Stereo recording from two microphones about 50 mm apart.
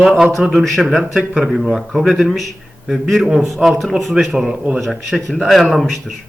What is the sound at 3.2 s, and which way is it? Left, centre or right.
Speech, centre.